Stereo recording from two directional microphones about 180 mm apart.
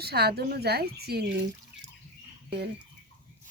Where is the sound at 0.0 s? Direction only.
60° right (ahead or behind).